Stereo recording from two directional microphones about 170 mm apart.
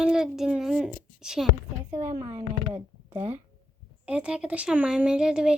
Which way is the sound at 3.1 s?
35° right (ahead or behind).